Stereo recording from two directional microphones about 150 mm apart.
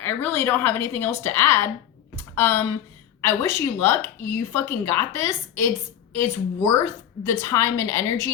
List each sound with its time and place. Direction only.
0.0 s a woman's voice: 15° left (ahead or behind)
2.1 s computer keyboard: 15° left (ahead or behind)
3.2 s a woman's voice: 15° left (ahead or behind)